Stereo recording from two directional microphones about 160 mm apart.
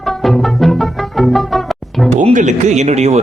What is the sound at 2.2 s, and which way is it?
A man's voice, 50° right (ahead or behind).